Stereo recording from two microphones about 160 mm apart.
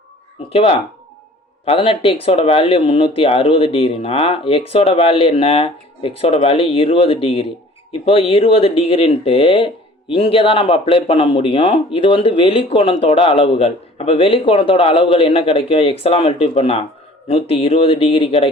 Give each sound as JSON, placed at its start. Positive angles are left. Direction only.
{"t": 0.5, "sound": "speech", "side_deg": 35}